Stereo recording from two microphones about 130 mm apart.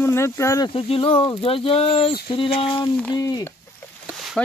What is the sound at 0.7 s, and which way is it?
Speech, 45° left (ahead or behind).